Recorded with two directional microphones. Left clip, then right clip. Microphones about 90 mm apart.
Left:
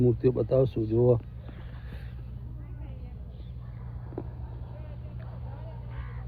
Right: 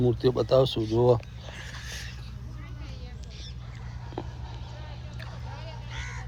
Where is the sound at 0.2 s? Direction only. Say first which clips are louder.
Right 2 dB; 30° left (ahead or behind).